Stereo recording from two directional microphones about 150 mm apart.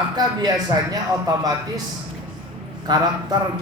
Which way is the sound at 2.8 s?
30° right (ahead or behind).